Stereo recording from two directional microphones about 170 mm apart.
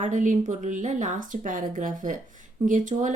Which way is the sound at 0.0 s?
45° right (ahead or behind).